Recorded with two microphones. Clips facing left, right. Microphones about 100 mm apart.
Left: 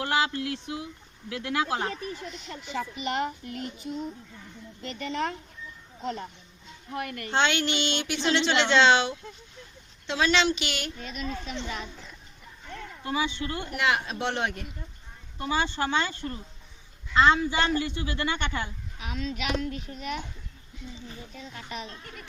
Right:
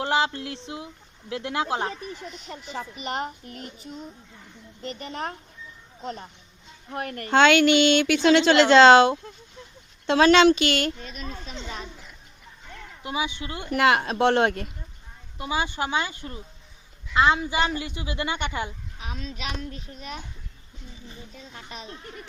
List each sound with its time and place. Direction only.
0.0 s speech: 25° right (ahead or behind)
1.9 s speech: centre (ahead or behind)
2.6 s a child's voice: 40° right (ahead or behind)
6.9 s a child's voice: 40° right (ahead or behind)
7.4 s speech: 90° right
8.2 s a woman's voice: 45° right (ahead or behind)
11.0 s a child's voice: 40° right (ahead or behind)
13.0 s a woman's voice: 15° right (ahead or behind)
13.8 s speech: 55° right (ahead or behind)
15.4 s a woman's voice: 15° right (ahead or behind)
18.9 s a child's voice: 35° right (ahead or behind)
21.8 s speech: 25° right (ahead or behind)